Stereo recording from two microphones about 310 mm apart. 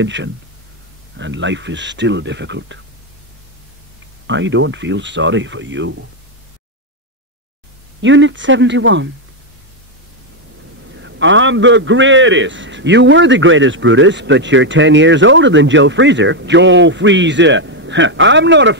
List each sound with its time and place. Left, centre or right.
0.0 s a man's voice: right
4.3 s a man's voice: right
8.0 s a man's voice: right
11.0 s a man's voice: right